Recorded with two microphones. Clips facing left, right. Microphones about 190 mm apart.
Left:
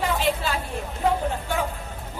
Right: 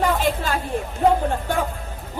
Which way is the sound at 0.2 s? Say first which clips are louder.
Right 2 dB; 45° right (ahead or behind).